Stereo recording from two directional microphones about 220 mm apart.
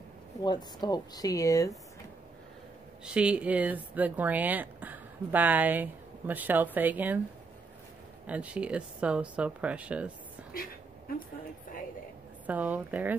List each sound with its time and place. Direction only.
0.4 s speech: 20° left (ahead or behind)
3.1 s speech: 5° right (ahead or behind)
8.3 s speech: 5° right (ahead or behind)
12.4 s speech: 5° right (ahead or behind)